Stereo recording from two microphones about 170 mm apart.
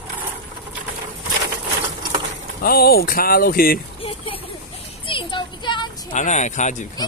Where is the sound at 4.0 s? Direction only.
35° left (ahead or behind).